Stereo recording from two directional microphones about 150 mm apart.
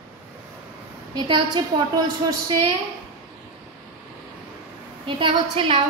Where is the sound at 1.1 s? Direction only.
30° right (ahead or behind).